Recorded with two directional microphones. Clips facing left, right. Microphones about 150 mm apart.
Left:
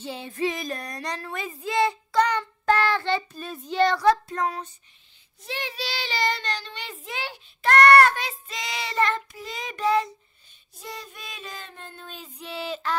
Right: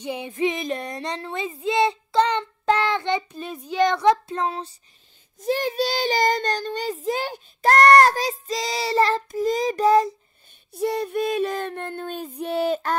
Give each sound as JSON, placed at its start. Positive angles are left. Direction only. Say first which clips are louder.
{"t": 0.0, "sound": "child singing", "louder": "right 4 dB", "side_deg": -15}
{"t": 5.4, "sound": "child singing", "louder": "right 11 dB", "side_deg": -45}
{"t": 10.7, "sound": "child singing", "louder": "right 16 dB", "side_deg": -60}